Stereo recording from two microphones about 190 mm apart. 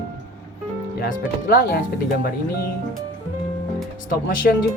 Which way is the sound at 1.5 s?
55° left (ahead or behind).